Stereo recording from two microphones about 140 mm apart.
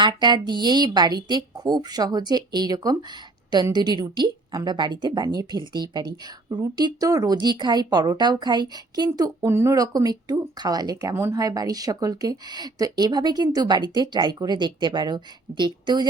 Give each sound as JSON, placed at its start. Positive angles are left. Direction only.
{"t": 0.0, "sound": "speech", "side_deg": -35}